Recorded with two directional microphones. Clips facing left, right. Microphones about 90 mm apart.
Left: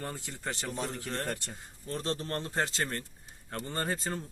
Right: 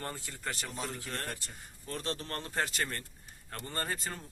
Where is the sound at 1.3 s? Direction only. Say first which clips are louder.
Left 6 dB; 60° left (ahead or behind).